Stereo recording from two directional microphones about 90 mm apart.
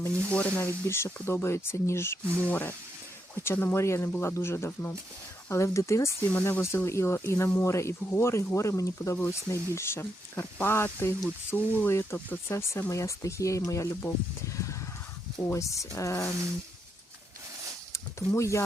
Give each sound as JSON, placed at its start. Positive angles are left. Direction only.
{"t": 0.3, "sound": "speech", "side_deg": 15}
{"t": 0.6, "sound": "speech", "side_deg": 30}
{"t": 6.3, "sound": "speech", "side_deg": 20}
{"t": 6.6, "sound": "speech", "side_deg": 30}
{"t": 14.5, "sound": "a sound", "side_deg": 35}
{"t": 15.4, "sound": "speech", "side_deg": 35}
{"t": 17.9, "sound": "speech", "side_deg": 35}